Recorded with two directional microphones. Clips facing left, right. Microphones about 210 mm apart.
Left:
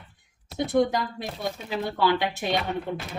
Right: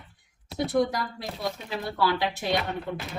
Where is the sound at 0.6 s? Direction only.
20° left (ahead or behind).